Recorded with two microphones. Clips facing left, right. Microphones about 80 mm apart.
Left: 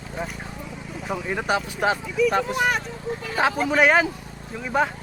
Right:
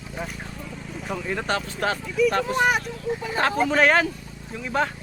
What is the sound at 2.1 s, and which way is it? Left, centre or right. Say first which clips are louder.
Speech: right 3 dB; centre.